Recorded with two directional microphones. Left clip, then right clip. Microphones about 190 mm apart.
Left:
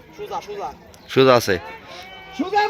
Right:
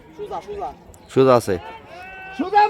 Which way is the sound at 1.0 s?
15° right (ahead or behind).